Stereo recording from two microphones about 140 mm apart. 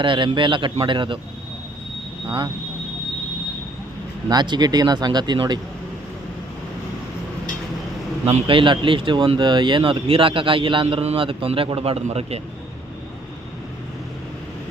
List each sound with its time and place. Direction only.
0.0 s speech: 35° right (ahead or behind)
4.3 s speech: 30° right (ahead or behind)
8.3 s speech: 40° right (ahead or behind)